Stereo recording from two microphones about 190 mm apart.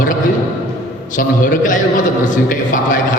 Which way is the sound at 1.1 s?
45° left (ahead or behind).